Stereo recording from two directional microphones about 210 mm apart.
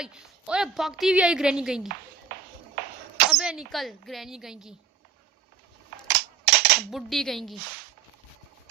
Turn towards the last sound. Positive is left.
turn(degrees=0)  # may be behind; listen again after turning